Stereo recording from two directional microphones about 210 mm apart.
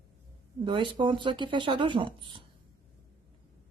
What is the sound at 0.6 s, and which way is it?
A woman's voice, 20° right (ahead or behind).